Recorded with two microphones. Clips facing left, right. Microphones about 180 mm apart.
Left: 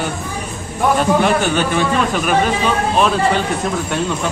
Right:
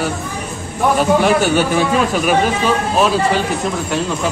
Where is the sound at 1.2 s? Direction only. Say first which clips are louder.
Right 2 dB; 5° right (ahead or behind).